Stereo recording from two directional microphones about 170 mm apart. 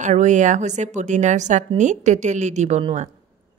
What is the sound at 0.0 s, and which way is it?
A woman's voice, 45° right (ahead or behind).